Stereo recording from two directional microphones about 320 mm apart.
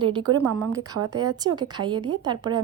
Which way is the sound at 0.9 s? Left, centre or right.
Right.